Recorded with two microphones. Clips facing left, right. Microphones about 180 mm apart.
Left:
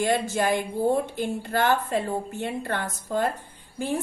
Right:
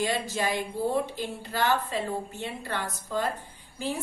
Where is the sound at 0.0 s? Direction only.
50° left (ahead or behind).